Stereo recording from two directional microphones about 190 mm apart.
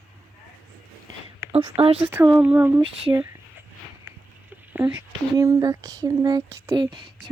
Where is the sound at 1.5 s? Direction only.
30° right (ahead or behind).